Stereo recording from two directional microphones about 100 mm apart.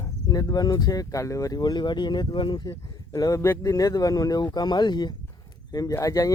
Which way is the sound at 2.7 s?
35° left (ahead or behind).